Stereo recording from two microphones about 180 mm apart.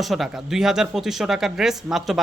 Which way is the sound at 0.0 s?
Centre (ahead or behind).